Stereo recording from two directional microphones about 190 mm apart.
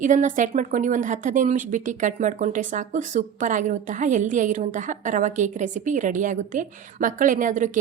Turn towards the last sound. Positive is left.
turn(degrees=-40)  # may be behind; listen again after turning